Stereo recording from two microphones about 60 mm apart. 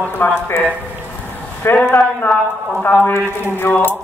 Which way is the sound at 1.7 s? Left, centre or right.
Left.